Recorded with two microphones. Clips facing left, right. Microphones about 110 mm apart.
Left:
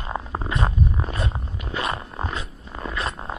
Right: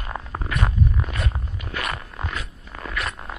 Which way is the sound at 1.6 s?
25° left (ahead or behind).